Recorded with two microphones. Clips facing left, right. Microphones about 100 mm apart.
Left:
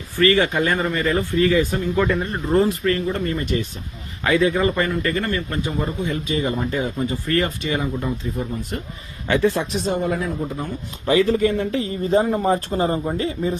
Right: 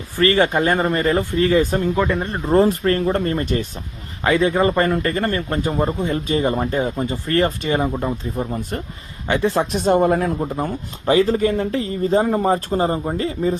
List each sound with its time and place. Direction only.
0.2 s speech: 35° right (ahead or behind)
2.0 s speech: 15° right (ahead or behind)
2.2 s speech: 30° right (ahead or behind)
4.2 s a man's voice: 30° right (ahead or behind)
9.2 s a man's voice: 20° right (ahead or behind)
9.6 s speech: 50° right (ahead or behind)
10.4 s speech: 70° right (ahead or behind)
11.0 s speech: 35° right (ahead or behind)